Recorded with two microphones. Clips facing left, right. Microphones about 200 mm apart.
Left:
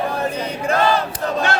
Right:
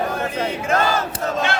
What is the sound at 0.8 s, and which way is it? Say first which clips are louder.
Battle cry: left 6 dB; 45° right (ahead or behind).